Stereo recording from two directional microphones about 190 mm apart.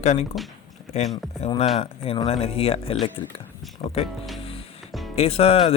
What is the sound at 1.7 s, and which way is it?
Speech, 30° left (ahead or behind).